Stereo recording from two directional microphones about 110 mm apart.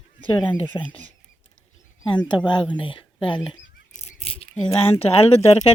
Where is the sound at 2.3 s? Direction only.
45° left (ahead or behind).